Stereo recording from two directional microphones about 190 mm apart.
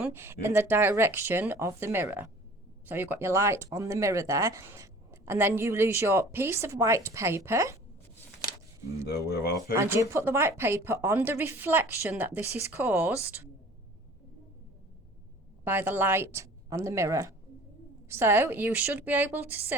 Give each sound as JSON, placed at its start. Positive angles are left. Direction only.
{"t": 0.0, "sound": "speech", "side_deg": -10}
{"t": 9.0, "sound": "speech", "side_deg": 55}
{"t": 9.7, "sound": "speech", "side_deg": -15}
{"t": 15.6, "sound": "speech", "side_deg": -10}